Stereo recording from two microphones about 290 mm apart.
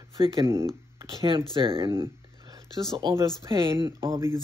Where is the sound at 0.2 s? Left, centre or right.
Centre.